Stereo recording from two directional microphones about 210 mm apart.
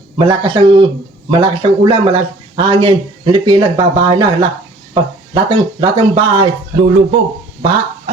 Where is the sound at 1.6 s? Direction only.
25° right (ahead or behind).